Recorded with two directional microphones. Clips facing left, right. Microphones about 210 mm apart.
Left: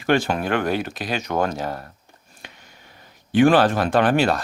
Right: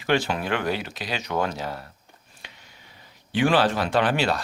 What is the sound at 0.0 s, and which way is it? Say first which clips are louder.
Speech: left 4 dB; 50° left (ahead or behind).